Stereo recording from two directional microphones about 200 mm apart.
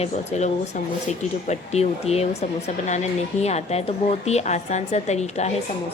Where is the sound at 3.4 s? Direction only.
35° left (ahead or behind).